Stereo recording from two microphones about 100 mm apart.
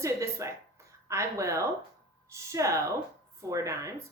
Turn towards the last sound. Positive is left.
turn(degrees=-30)  # may be behind; listen again after turning